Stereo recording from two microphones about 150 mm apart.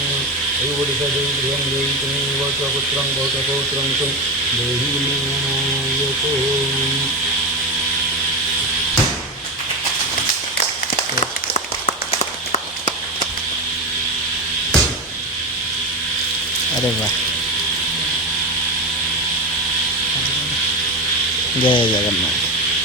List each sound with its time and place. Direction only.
21.6 s speech: 35° left (ahead or behind)